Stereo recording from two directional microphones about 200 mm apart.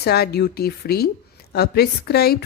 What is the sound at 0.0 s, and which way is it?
Speech, 50° left (ahead or behind).